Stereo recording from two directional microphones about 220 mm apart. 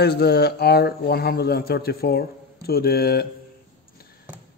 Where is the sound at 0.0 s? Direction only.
45° left (ahead or behind).